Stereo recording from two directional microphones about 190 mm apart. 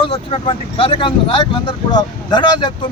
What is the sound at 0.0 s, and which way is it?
Speech, 30° left (ahead or behind).